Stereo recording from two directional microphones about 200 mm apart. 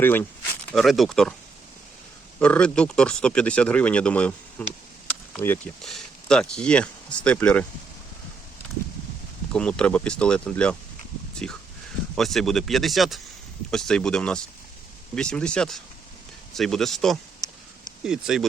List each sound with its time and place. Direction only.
0.0 s speech: 10° left (ahead or behind)
2.4 s speech: 5° left (ahead or behind)
9.5 s speech: 5° left (ahead or behind)